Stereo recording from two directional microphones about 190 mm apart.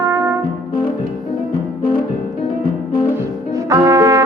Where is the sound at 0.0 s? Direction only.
15° right (ahead or behind).